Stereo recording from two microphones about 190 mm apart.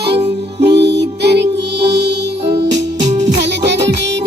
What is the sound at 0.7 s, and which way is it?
Music, 65° right (ahead or behind).